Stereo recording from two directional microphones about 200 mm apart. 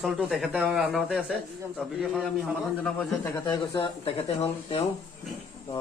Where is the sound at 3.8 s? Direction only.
30° left (ahead or behind).